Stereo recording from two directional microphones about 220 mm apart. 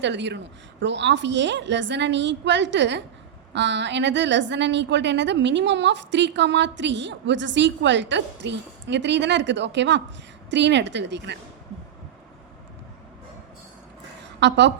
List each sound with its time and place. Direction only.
0.0 s a woman's voice: 55° right (ahead or behind)
14.3 s a woman's voice: 50° right (ahead or behind)